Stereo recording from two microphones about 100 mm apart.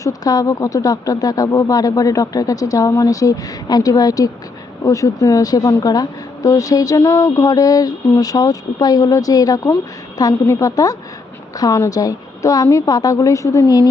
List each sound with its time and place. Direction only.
0.0 s a woman's voice: 40° left (ahead or behind)